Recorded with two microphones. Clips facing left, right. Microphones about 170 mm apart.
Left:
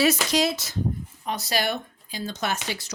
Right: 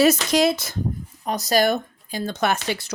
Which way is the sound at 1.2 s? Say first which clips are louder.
Right 7 dB; 40° right (ahead or behind).